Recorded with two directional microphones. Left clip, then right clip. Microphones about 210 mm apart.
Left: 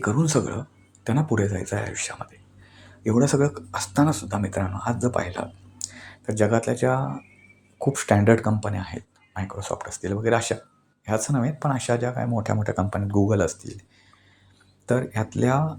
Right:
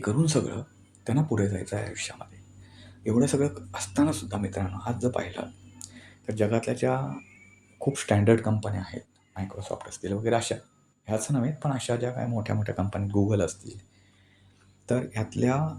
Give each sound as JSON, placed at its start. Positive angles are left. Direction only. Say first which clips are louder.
{"t": 0.0, "sound": "speech", "louder": "left 4 dB", "side_deg": 15}
{"t": 14.8, "sound": "speech", "louder": "left 5 dB", "side_deg": 15}